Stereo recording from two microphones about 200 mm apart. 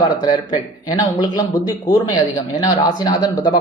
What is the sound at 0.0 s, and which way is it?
Speech, 20° left (ahead or behind).